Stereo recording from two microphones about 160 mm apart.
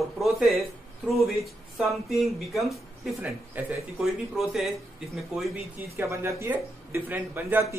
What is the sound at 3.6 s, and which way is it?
Speech, 10° right (ahead or behind).